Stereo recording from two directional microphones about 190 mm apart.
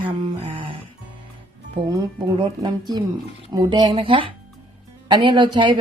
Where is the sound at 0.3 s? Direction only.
25° right (ahead or behind).